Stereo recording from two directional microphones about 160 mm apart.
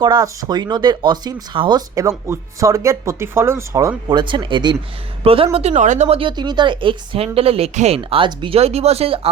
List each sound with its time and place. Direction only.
0.0 s a woman's voice: 25° right (ahead or behind)
5.5 s speech: 45° right (ahead or behind)